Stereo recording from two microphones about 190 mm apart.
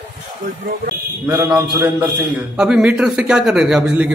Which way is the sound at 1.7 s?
20° right (ahead or behind).